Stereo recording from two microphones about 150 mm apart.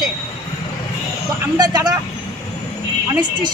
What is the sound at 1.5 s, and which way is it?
Speech, 25° right (ahead or behind).